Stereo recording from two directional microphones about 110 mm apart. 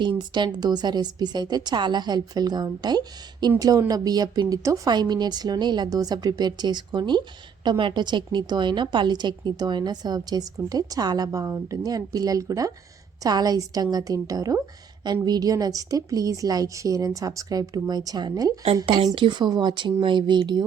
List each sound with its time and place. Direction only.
0.0 s a woman's voice: 45° right (ahead or behind)